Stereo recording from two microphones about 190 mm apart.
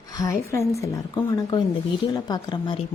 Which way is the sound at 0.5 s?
15° left (ahead or behind).